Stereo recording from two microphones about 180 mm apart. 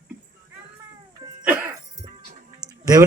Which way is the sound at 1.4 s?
10° right (ahead or behind).